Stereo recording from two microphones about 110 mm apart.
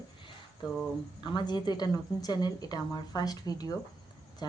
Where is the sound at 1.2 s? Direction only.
45° left (ahead or behind).